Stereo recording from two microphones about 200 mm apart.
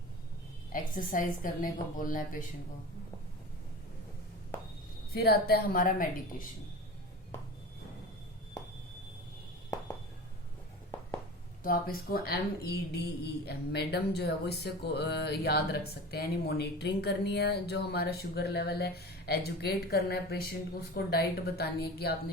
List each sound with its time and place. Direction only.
0.7 s a woman's voice: 40° left (ahead or behind)
5.1 s speech: 50° left (ahead or behind)
11.6 s speech: 45° left (ahead or behind)